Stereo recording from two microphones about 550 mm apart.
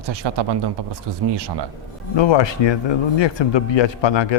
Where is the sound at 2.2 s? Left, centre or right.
Left.